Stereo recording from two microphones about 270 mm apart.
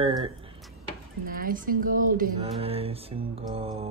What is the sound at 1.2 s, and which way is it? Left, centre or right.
A woman's voice, right.